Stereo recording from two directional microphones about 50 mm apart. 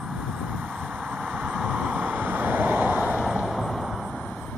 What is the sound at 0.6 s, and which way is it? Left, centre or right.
Vehicle, right.